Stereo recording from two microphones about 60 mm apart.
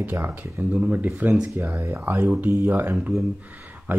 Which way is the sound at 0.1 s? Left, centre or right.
Right.